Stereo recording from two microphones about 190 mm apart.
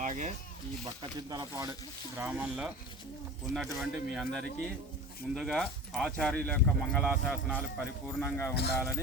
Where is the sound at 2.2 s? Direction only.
10° right (ahead or behind).